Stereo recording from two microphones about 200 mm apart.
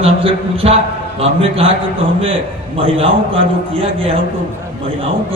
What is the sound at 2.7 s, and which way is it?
A man's voice, 25° right (ahead or behind).